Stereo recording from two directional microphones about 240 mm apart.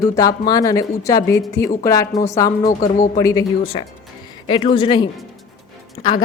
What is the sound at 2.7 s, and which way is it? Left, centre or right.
Speech, left.